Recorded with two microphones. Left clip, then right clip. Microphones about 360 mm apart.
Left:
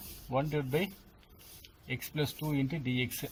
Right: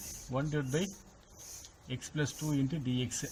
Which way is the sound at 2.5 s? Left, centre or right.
Left.